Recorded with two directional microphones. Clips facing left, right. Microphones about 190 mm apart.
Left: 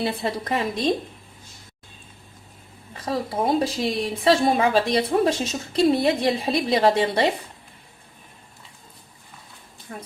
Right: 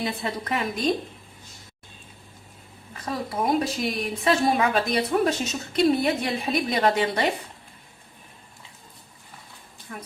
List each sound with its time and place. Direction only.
0.0 s a woman's voice: 30° left (ahead or behind)
3.0 s a woman's voice: 30° left (ahead or behind)
9.9 s a woman's voice: 30° left (ahead or behind)